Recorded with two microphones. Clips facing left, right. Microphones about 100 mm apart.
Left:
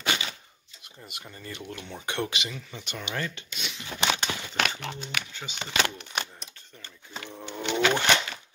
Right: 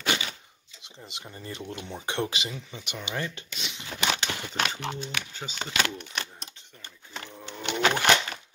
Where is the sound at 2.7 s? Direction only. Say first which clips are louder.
Even; 15° right (ahead or behind).